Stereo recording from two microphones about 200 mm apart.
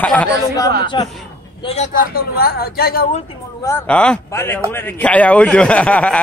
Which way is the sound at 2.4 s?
50° left (ahead or behind).